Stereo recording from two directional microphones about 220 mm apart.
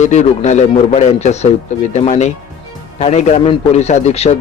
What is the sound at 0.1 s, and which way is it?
A man's voice, 30° left (ahead or behind).